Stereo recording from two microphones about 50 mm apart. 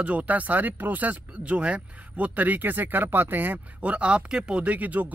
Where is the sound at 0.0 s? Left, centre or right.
Right.